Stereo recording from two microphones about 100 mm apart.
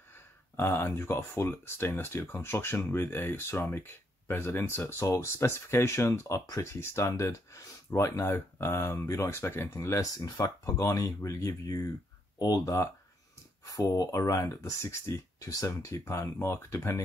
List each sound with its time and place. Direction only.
0.1 s speech: 25° left (ahead or behind)